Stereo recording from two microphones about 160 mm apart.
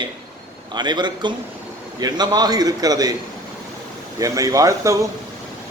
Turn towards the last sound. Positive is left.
turn(degrees=-20)  # may be behind; listen again after turning